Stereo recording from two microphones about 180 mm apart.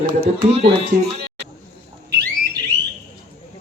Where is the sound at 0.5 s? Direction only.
30° right (ahead or behind).